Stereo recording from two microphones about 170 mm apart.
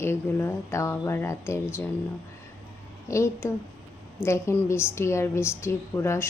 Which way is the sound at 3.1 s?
15° left (ahead or behind).